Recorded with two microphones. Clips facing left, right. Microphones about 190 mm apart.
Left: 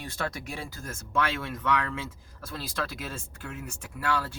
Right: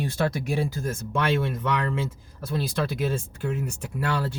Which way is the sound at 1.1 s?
20° right (ahead or behind).